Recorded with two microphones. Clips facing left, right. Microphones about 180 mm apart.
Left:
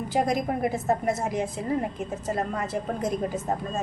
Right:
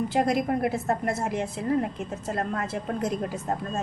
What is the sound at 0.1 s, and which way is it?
A woman's voice, centre (ahead or behind).